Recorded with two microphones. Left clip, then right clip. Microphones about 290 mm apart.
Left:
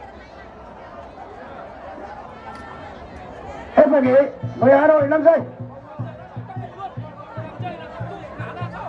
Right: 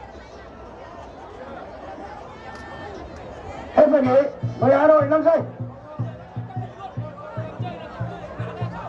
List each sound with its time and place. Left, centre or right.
3.7 s a man's voice: left